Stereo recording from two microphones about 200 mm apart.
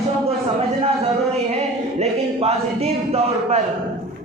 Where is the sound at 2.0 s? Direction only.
30° right (ahead or behind).